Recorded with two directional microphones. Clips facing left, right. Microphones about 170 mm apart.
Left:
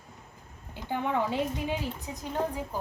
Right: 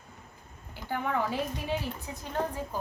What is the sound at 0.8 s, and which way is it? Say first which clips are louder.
A woman's voice: left 2 dB; 20° left (ahead or behind).